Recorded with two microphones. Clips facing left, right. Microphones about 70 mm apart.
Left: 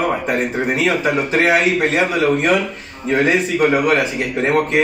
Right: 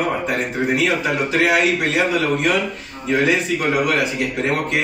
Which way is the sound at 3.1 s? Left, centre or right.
Left.